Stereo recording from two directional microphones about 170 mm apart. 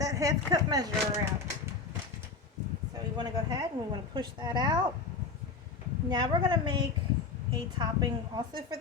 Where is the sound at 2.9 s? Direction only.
25° right (ahead or behind).